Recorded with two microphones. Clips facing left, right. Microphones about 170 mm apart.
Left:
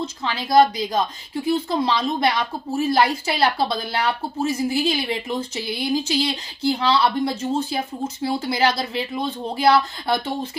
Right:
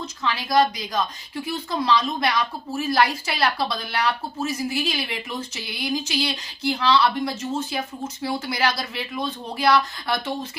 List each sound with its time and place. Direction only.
0.0 s speech: 30° left (ahead or behind)